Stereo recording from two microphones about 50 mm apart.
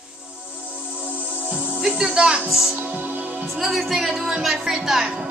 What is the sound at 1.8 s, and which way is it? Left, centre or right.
Speech, centre.